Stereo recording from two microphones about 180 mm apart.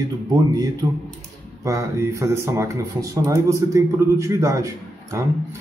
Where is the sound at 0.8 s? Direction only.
20° right (ahead or behind).